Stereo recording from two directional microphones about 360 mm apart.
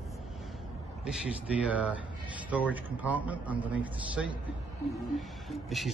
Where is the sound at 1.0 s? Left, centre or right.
Centre.